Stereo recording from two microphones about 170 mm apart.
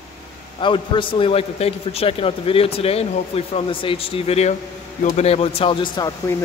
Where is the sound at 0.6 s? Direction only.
30° left (ahead or behind).